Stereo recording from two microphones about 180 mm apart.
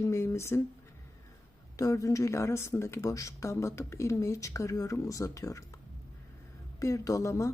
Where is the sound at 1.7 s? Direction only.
20° left (ahead or behind).